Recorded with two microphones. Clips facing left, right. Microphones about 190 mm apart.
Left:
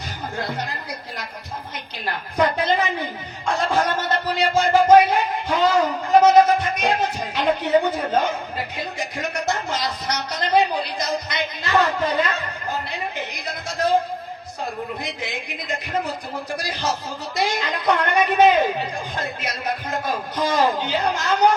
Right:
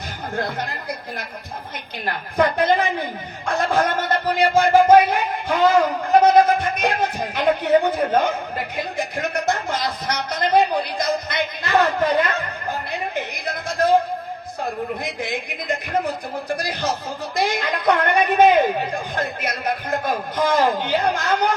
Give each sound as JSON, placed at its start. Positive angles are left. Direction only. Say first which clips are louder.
{"t": 0.3, "sound": "a man's voice", "louder": "right 3 dB", "side_deg": -55}